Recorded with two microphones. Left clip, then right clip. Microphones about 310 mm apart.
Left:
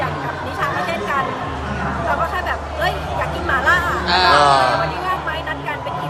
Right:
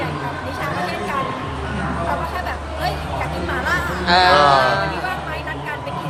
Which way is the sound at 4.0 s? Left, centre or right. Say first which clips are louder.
Right 4 dB; right.